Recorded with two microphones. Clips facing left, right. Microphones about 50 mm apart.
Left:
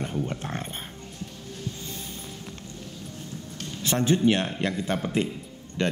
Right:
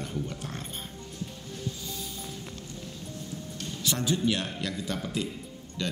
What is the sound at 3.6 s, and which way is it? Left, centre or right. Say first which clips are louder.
A man's voice: left 5 dB; left.